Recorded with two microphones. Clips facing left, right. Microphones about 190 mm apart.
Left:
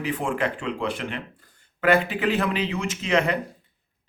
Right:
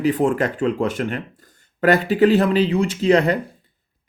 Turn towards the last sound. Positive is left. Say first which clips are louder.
# right 7 dB
turn(degrees=-35)  # may be behind; listen again after turning